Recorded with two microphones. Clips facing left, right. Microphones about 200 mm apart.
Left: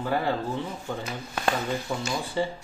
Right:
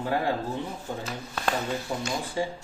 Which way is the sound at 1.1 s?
15° left (ahead or behind).